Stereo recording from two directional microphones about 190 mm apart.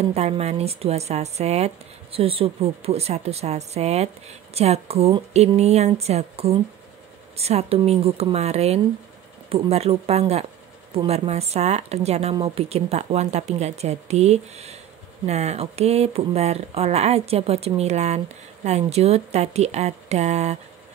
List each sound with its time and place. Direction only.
0.1 s speech: 35° right (ahead or behind)